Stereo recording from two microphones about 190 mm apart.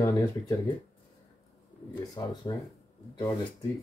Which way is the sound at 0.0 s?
15° left (ahead or behind).